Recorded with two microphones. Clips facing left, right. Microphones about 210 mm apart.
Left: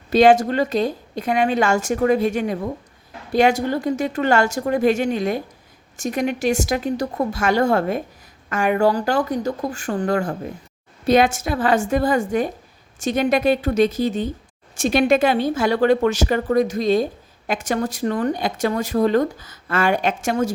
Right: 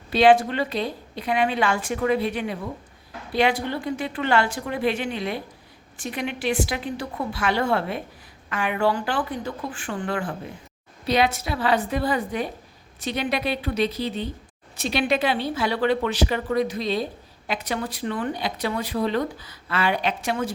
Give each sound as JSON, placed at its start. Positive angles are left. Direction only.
{"t": 0.1, "sound": "a woman's voice", "side_deg": 45}